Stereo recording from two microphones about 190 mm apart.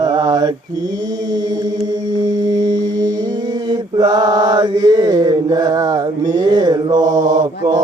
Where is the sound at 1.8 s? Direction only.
20° right (ahead or behind).